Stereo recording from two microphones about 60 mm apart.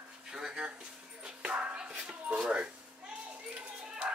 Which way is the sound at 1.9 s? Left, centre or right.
Centre.